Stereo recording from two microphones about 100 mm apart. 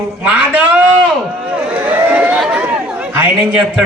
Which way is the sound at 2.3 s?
Centre (ahead or behind).